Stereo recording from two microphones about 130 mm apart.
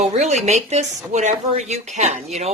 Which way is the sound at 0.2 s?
60° right (ahead or behind).